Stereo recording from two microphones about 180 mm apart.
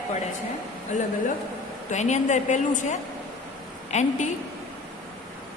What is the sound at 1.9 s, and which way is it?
A woman's voice, 40° left (ahead or behind).